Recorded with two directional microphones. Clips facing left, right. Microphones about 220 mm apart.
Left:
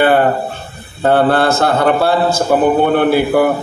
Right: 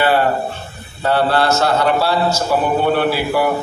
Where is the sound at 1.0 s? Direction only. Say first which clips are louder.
Left 4 dB; 50° left (ahead or behind).